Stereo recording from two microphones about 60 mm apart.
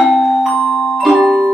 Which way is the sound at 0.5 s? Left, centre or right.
Centre.